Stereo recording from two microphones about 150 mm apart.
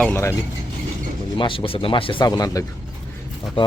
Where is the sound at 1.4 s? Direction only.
35° left (ahead or behind).